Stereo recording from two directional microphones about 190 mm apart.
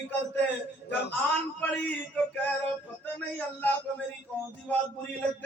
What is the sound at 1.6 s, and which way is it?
A man's voice, 10° left (ahead or behind).